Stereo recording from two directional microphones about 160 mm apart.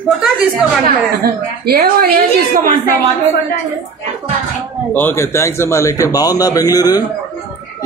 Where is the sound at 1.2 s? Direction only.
75° right (ahead or behind).